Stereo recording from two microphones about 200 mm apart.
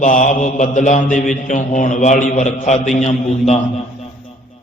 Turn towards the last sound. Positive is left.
turn(degrees=35)  # may be behind; listen again after turning